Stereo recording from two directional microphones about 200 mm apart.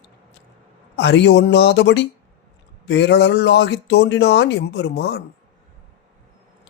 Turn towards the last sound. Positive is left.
turn(degrees=60)  # may be behind; listen again after turning